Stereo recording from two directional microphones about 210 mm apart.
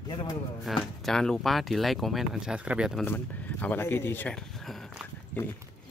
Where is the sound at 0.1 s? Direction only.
20° left (ahead or behind).